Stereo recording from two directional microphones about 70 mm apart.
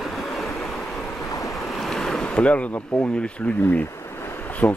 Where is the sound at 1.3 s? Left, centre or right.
Left.